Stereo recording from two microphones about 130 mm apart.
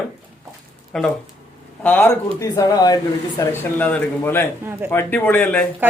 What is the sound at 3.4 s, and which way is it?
Speech, 10° left (ahead or behind).